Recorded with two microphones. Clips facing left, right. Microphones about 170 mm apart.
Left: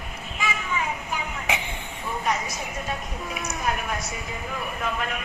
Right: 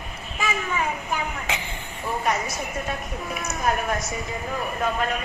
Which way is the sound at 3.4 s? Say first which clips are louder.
Right 4 dB; 45° right (ahead or behind).